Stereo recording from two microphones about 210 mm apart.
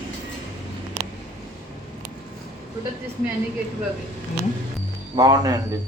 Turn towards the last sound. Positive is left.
turn(degrees=-20)  # may be behind; listen again after turning